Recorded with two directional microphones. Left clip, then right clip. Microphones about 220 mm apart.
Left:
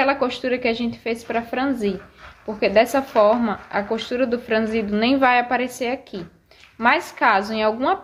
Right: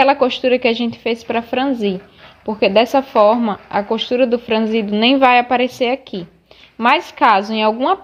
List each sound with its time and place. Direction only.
0.0 s a woman's voice: 30° right (ahead or behind)